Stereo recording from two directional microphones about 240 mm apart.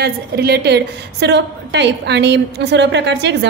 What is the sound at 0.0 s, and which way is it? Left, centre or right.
A woman's voice, right.